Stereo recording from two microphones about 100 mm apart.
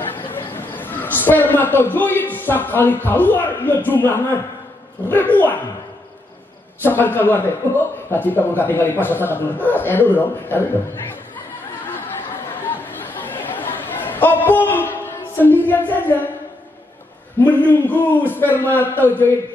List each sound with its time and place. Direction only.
0.5 s a man's voice: 20° left (ahead or behind)
6.8 s a man's voice: 20° left (ahead or behind)
12.6 s chatter: 20° left (ahead or behind)
17.4 s a man's voice: 20° left (ahead or behind)